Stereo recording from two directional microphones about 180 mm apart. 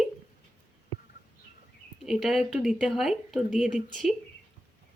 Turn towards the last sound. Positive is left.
turn(degrees=0)  # may be behind; listen again after turning